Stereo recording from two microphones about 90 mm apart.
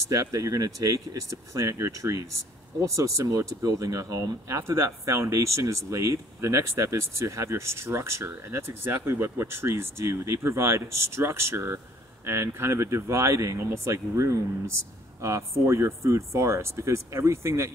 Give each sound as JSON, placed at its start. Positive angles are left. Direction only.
{"t": 0.0, "sound": "speech", "side_deg": -40}